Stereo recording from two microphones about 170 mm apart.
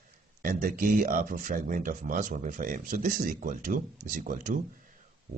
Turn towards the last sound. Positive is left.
turn(degrees=-50)  # may be behind; listen again after turning